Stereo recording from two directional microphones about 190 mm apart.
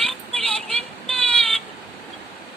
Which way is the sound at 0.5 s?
5° left (ahead or behind).